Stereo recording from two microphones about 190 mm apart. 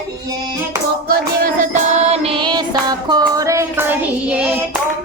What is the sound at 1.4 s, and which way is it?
Music, 40° right (ahead or behind).